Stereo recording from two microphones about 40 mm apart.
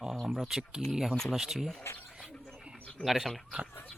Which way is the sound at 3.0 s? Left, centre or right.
Centre.